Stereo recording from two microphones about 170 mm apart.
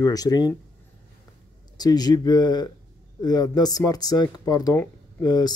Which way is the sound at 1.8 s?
25° left (ahead or behind).